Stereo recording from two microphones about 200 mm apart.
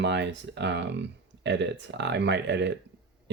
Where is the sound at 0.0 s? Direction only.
60° right (ahead or behind).